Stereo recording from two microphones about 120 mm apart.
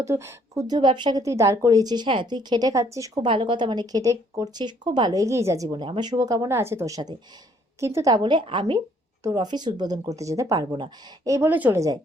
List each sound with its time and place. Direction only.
0.0 s speech: 20° right (ahead or behind)
0.8 s speech: 40° right (ahead or behind)
1.2 s speech: 25° right (ahead or behind)
3.2 s speech: 45° right (ahead or behind); by 5.6 s 25° right (ahead or behind)
5.6 s speech: 40° right (ahead or behind); by 8.1 s 25° right (ahead or behind)
8.1 s a woman's voice: 40° right (ahead or behind)
11.3 s speech: 15° right (ahead or behind)